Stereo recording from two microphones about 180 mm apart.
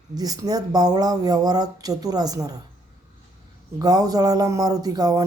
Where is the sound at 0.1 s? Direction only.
20° right (ahead or behind).